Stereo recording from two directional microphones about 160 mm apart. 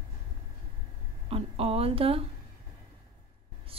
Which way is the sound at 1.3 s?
40° right (ahead or behind).